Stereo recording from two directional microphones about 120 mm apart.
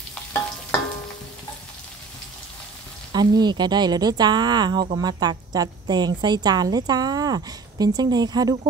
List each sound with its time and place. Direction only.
3.1 s a woman's voice: 35° right (ahead or behind)